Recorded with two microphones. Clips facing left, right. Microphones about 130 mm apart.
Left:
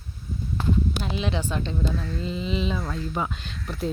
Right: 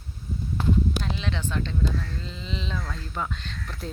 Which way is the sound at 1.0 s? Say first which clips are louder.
Left 3 dB; 15° left (ahead or behind).